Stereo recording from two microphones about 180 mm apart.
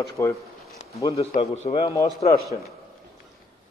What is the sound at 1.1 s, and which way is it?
Speech, 35° left (ahead or behind).